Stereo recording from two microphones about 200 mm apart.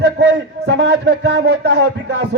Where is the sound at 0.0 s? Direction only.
60° right (ahead or behind).